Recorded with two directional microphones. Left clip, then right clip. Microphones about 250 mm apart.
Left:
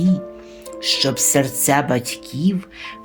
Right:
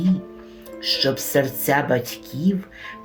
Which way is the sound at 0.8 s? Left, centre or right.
Left.